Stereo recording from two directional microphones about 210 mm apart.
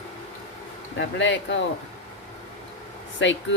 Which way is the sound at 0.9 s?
60° left (ahead or behind).